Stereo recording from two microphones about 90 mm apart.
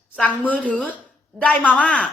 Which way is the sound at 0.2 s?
15° left (ahead or behind).